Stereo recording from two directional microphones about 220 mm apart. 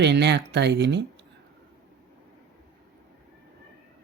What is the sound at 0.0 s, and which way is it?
Speech, 50° right (ahead or behind).